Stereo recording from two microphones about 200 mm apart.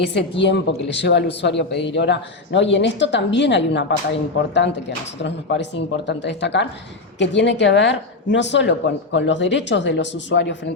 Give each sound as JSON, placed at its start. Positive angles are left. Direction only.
{"t": 0.1, "sound": "speech", "side_deg": 60}